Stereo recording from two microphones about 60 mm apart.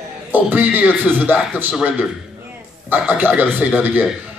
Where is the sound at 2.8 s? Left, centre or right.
Right.